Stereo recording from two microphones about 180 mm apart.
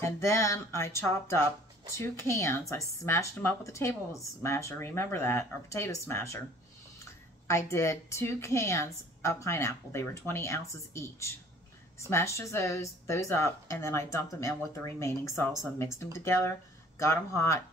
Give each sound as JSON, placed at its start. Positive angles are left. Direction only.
{"t": 0.0, "sound": "a woman's voice", "side_deg": 15}
{"t": 7.4, "sound": "a woman's voice", "side_deg": 15}